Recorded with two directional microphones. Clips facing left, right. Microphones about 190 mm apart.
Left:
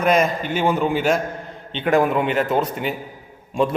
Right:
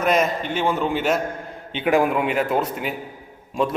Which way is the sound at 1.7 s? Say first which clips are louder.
Left 1 dB; 10° right (ahead or behind).